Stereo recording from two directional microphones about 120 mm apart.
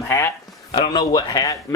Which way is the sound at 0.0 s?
25° left (ahead or behind).